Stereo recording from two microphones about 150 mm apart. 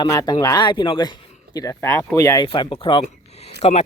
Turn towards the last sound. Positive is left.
turn(degrees=45)  # may be behind; listen again after turning